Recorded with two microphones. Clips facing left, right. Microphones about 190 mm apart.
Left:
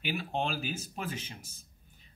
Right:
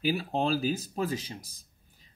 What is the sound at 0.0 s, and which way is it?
Speech, 35° right (ahead or behind).